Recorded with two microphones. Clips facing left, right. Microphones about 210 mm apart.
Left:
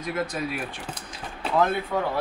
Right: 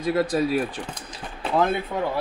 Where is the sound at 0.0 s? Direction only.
35° right (ahead or behind).